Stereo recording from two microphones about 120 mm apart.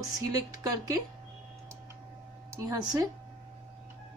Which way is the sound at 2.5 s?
30° right (ahead or behind).